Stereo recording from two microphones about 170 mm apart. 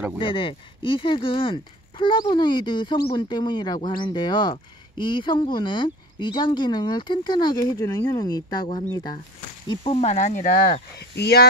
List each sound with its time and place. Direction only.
0.2 s speech: 30° left (ahead or behind)
9.7 s speech: 35° left (ahead or behind)
11.0 s speech: 75° left (ahead or behind)